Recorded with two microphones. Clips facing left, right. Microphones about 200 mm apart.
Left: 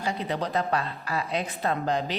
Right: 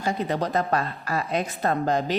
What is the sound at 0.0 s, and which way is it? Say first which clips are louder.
A woman's voice: right 3 dB; 45° right (ahead or behind).